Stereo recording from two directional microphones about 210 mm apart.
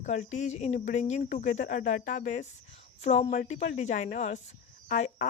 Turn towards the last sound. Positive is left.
turn(degrees=35)  # may be behind; listen again after turning